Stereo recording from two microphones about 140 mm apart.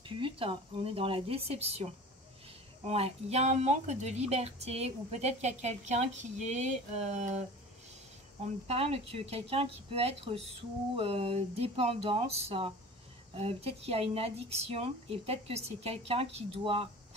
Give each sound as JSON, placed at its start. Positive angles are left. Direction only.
{"t": 0.0, "sound": "speech", "side_deg": -40}
{"t": 8.6, "sound": "speech", "side_deg": -45}